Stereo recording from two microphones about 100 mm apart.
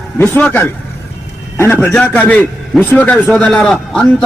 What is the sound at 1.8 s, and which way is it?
A man's voice, 10° left (ahead or behind).